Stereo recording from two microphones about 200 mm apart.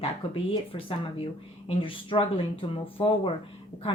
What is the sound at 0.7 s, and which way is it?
A woman's voice, 30° left (ahead or behind).